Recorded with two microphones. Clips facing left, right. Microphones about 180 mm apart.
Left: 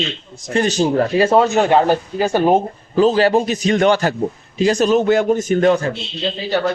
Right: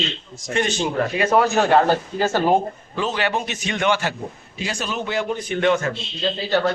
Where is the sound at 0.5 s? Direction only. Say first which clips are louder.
Left 6 dB; 40° left (ahead or behind); by 2.6 s 15° left (ahead or behind).